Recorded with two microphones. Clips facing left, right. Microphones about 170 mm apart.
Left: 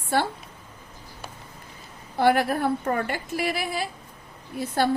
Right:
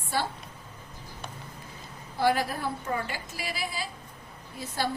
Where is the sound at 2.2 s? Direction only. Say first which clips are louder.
Left 5 dB; 60° left (ahead or behind).